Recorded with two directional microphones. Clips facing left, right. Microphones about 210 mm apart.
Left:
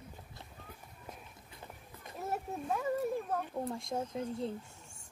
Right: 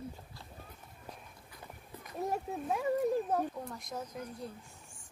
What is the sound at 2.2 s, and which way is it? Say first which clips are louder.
Speech: right 2 dB; 15° right (ahead or behind).